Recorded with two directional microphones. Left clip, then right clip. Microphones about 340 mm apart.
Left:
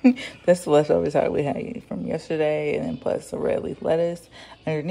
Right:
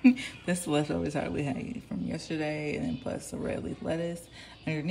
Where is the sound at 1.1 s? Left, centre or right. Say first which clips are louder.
Left 11 dB; left.